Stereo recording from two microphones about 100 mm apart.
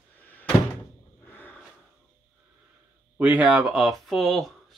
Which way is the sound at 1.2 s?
20° left (ahead or behind).